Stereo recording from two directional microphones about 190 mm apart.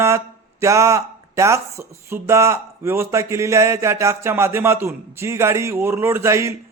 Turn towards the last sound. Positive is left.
turn(degrees=-15)  # may be behind; listen again after turning